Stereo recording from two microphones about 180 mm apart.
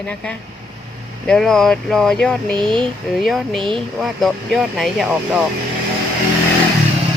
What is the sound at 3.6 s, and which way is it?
Speech, 30° right (ahead or behind).